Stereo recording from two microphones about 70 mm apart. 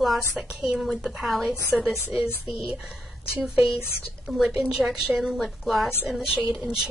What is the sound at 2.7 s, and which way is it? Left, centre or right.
A woman's voice, centre.